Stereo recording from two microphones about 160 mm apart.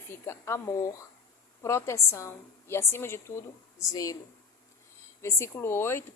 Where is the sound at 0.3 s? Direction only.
15° left (ahead or behind).